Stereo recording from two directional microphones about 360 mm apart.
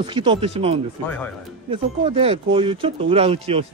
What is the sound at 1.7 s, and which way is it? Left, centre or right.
Speech, centre.